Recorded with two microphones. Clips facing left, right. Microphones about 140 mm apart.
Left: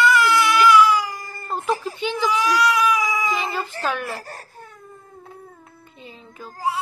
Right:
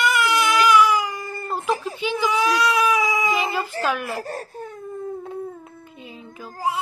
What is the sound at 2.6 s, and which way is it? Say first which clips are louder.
Baby cry: even; 25° right (ahead or behind).